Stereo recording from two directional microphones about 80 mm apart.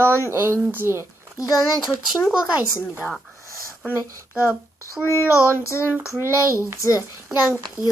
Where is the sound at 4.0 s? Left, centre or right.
Right.